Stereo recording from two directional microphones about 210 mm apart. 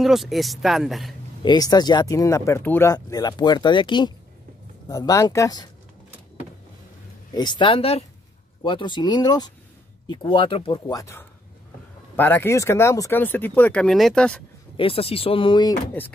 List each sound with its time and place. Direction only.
0.0 s speech: centre (ahead or behind)
1.4 s speech: 20° left (ahead or behind)
7.3 s speech: 20° left (ahead or behind); by 14.4 s 5° left (ahead or behind)
14.8 s speech: 25° left (ahead or behind)
16.0 s speech: 10° left (ahead or behind)